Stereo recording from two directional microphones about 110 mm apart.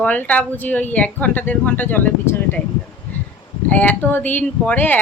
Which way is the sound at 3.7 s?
15° left (ahead or behind).